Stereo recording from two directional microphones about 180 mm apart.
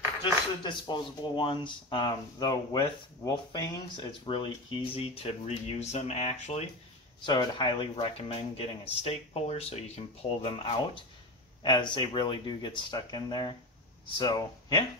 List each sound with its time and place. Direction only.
0.2 s speech: 25° left (ahead or behind)
7.2 s speech: 25° left (ahead or behind)